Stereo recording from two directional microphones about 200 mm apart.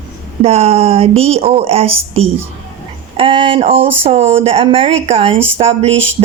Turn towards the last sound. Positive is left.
turn(degrees=-70)  # may be behind; listen again after turning